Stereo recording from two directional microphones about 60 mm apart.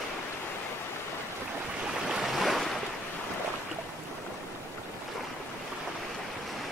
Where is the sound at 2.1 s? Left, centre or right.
Centre.